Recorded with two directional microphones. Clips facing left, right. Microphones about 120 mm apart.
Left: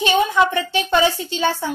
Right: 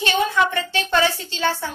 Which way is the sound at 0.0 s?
15° left (ahead or behind).